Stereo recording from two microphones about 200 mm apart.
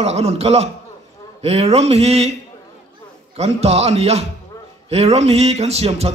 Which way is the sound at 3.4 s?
30° right (ahead or behind).